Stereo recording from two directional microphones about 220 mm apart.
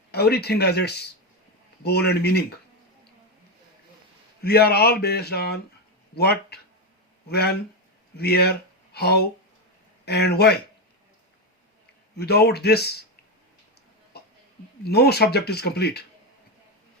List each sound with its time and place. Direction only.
0.1 s speech: 45° left (ahead or behind)
4.4 s speech: 45° left (ahead or behind)
7.3 s speech: 45° left (ahead or behind)
12.1 s speech: 45° left (ahead or behind)
14.1 s a sound: 45° left (ahead or behind)
14.8 s speech: 45° left (ahead or behind)